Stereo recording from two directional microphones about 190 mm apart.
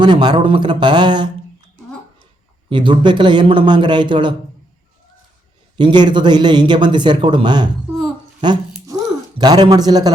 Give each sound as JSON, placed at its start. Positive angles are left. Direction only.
{"t": 0.0, "sound": "a man's voice", "side_deg": -25}
{"t": 2.6, "sound": "a man's voice", "side_deg": -25}
{"t": 5.7, "sound": "a man's voice", "side_deg": -25}